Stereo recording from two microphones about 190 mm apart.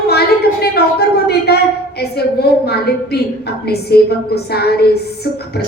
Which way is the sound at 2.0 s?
55° left (ahead or behind).